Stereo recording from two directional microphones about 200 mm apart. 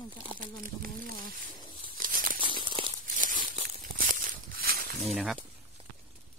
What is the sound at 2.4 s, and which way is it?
Tearing, 25° right (ahead or behind).